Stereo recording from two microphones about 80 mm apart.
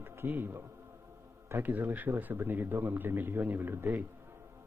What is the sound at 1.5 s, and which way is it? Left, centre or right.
A man's voice, right.